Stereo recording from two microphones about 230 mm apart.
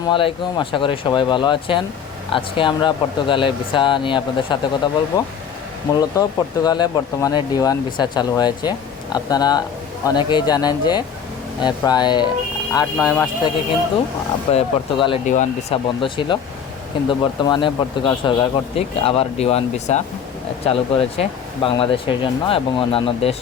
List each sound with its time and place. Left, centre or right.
0.1 s speech: left
14.5 s speech: left